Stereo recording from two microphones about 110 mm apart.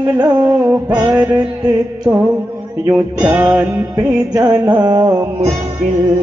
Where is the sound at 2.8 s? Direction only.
10° right (ahead or behind).